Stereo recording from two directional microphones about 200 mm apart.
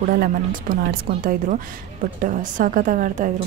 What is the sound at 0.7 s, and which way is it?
A woman's voice, 45° right (ahead or behind).